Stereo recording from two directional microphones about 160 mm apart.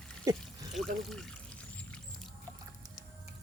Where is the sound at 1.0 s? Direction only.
Centre (ahead or behind).